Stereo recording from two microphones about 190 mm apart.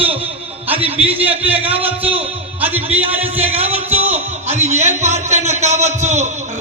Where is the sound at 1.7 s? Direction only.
10° right (ahead or behind).